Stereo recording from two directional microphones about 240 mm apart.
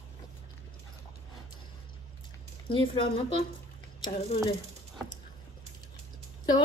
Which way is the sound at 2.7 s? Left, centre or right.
Left.